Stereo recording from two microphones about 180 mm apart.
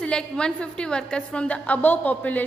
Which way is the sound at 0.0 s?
5° left (ahead or behind).